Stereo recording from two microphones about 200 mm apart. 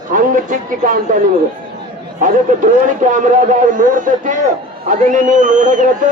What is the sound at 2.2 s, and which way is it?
A man's voice, 40° right (ahead or behind).